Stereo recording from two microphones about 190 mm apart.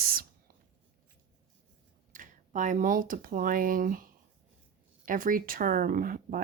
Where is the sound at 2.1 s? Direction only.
45° right (ahead or behind).